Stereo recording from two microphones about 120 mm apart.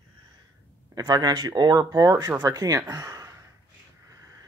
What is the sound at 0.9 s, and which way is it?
Speech, 35° right (ahead or behind).